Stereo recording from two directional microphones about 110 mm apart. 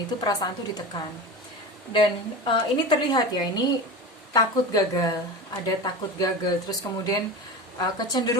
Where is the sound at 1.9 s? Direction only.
45° left (ahead or behind).